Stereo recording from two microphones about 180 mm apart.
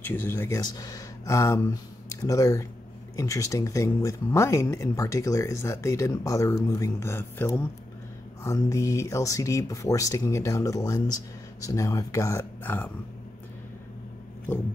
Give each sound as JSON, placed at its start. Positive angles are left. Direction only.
{"t": 0.0, "sound": "speech", "side_deg": 10}